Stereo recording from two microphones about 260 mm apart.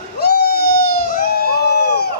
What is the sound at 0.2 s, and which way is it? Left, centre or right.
Crowd, left.